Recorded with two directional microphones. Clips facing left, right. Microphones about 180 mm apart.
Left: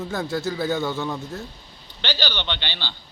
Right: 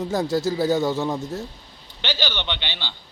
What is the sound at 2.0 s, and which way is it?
Speech, 15° right (ahead or behind).